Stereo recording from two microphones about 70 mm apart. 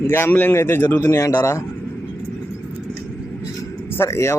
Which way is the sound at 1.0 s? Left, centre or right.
Left.